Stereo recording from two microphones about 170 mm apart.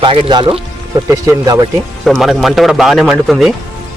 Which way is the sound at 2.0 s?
Centre (ahead or behind).